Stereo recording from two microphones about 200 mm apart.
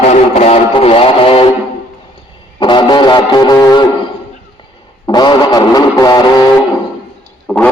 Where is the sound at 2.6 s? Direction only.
25° left (ahead or behind).